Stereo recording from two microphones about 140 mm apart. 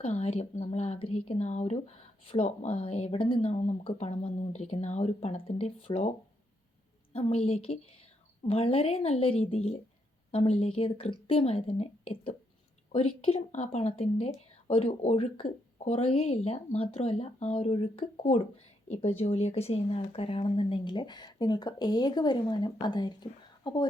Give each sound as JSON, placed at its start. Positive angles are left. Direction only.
{"t": 0.0, "sound": "a woman's voice", "side_deg": 45}
{"t": 12.9, "sound": "a woman's voice", "side_deg": 40}
{"t": 13.5, "sound": "a woman's voice", "side_deg": 55}